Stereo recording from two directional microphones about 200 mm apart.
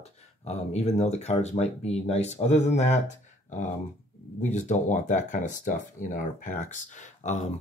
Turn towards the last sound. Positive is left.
turn(degrees=35)  # may be behind; listen again after turning